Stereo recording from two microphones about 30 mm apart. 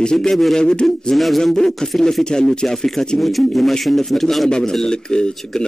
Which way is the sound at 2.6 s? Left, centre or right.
Centre.